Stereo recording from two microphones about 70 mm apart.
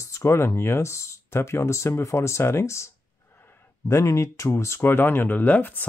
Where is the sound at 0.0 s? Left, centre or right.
Left.